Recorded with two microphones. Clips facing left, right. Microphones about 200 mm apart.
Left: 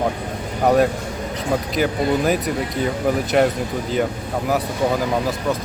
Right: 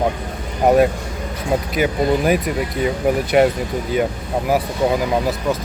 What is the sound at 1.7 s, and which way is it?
Speech, 5° right (ahead or behind).